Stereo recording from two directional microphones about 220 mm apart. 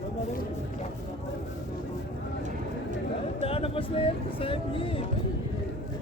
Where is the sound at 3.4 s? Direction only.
25° left (ahead or behind).